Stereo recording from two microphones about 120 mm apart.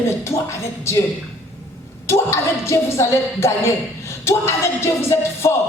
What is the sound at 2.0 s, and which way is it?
Music, 25° left (ahead or behind).